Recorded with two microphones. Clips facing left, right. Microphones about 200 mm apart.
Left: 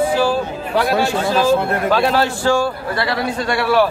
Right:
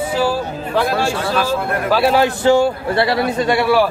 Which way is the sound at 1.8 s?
10° right (ahead or behind).